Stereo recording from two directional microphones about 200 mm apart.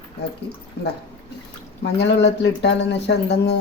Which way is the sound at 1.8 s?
60° left (ahead or behind).